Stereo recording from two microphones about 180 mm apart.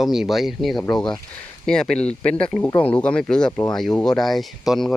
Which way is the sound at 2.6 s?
25° left (ahead or behind).